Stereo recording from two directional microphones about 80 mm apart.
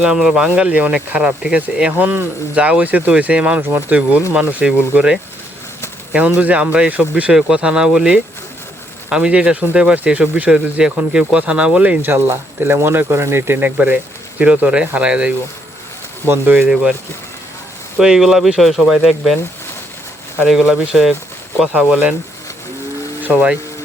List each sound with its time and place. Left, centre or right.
0.0 s speech: centre
12.1 s speech: right; by 15.3 s centre
16.2 s speech: right
18.0 s speech: centre
20.5 s speech: centre
23.2 s speech: right